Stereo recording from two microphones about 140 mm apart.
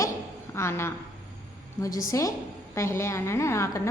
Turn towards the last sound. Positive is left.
turn(degrees=20)  # may be behind; listen again after turning